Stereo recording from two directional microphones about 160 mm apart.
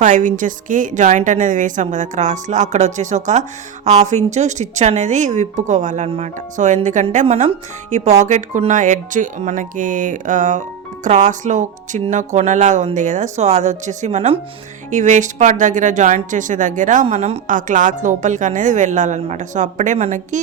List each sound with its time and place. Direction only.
0.0 s speech: 50° right (ahead or behind)
17.5 s speech: 55° right (ahead or behind)